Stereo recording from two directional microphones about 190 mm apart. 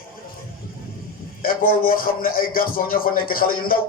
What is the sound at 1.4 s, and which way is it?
A man's voice, 50° left (ahead or behind).